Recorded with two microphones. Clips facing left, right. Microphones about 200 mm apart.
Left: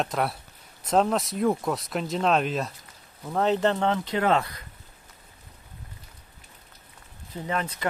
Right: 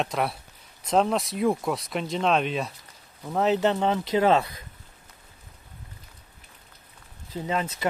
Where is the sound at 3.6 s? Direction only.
15° right (ahead or behind).